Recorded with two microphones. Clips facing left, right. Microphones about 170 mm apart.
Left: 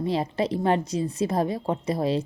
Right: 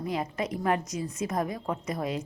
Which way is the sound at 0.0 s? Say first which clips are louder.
Left 6 dB; 30° left (ahead or behind).